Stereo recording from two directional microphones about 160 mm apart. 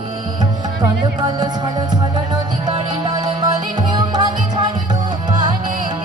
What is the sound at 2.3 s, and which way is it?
Music, 25° right (ahead or behind).